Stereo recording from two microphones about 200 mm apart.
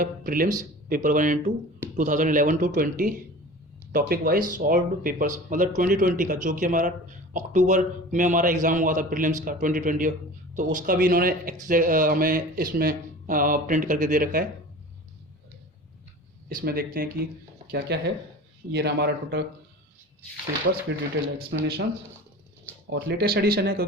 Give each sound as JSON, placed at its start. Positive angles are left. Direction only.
{"t": 0.0, "sound": "speech", "side_deg": -45}
{"t": 16.5, "sound": "speech", "side_deg": -45}
{"t": 20.7, "sound": "speech", "side_deg": -60}
{"t": 22.9, "sound": "speech", "side_deg": -55}